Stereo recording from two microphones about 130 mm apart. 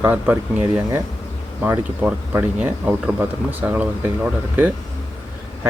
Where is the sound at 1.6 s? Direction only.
10° right (ahead or behind).